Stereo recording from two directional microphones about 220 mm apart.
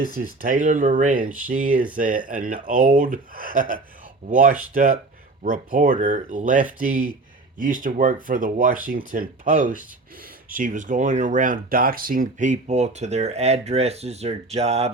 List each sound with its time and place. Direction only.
0.0 s speech: 40° right (ahead or behind)